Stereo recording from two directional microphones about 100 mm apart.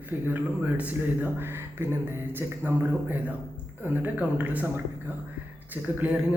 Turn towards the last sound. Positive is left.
turn(degrees=-20)  # may be behind; listen again after turning